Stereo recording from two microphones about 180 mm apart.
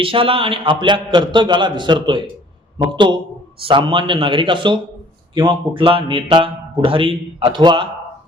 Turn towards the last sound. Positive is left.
turn(degrees=-25)  # may be behind; listen again after turning